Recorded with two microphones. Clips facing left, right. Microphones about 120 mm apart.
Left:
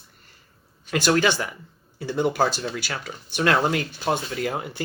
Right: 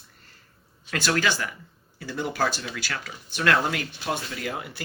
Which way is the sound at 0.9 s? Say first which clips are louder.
Left 5 dB; 20° left (ahead or behind).